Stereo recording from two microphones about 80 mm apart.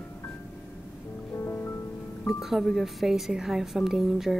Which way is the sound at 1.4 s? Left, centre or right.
Left.